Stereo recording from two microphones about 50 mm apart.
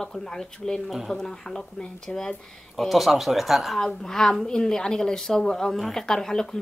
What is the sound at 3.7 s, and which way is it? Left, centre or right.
A woman's voice, centre.